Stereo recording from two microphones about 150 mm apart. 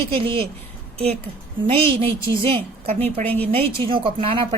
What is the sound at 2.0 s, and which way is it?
A woman's voice, 35° right (ahead or behind).